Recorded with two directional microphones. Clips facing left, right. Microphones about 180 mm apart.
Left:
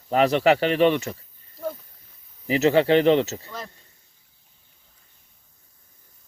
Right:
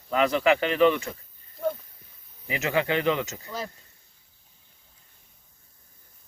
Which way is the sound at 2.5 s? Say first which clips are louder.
Left 8 dB; 35° left (ahead or behind).